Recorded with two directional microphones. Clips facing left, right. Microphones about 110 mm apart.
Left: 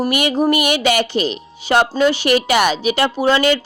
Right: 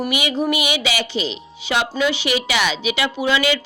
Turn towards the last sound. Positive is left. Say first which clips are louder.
# left 4 dB
turn(degrees=45)  # may be behind; listen again after turning